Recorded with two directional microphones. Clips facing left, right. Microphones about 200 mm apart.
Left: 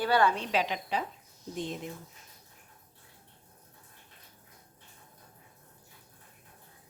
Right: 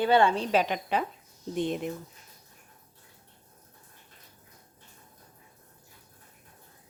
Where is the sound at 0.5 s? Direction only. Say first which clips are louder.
Right 4 dB; 50° right (ahead or behind).